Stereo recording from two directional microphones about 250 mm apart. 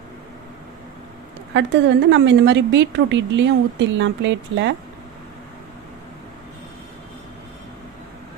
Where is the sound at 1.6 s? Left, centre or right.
Right.